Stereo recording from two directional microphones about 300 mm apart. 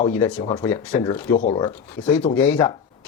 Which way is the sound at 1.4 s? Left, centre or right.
Centre.